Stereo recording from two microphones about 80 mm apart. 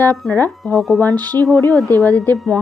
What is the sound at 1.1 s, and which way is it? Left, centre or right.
Speech, left.